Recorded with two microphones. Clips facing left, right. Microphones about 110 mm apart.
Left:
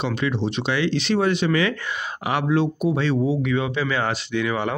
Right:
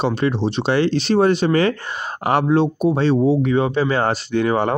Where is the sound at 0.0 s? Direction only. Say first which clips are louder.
Right 5 dB; 40° right (ahead or behind).